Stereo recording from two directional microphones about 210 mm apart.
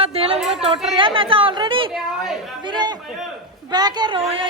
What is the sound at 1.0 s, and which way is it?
A man's voice, 25° right (ahead or behind).